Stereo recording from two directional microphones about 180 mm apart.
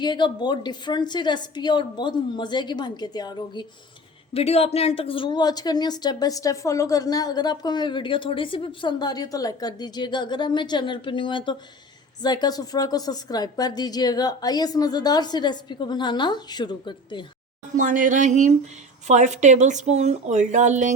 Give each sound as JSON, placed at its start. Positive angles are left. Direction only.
{"t": 0.0, "sound": "speech", "side_deg": 25}
{"t": 4.4, "sound": "speech", "side_deg": 35}
{"t": 17.7, "sound": "speech", "side_deg": -45}